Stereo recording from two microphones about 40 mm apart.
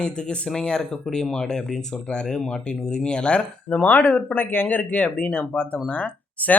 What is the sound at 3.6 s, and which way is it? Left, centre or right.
Speech, left.